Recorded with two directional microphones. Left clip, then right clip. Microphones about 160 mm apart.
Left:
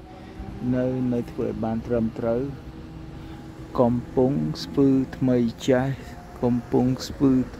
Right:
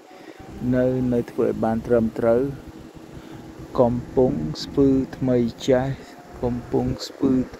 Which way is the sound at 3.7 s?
15° left (ahead or behind).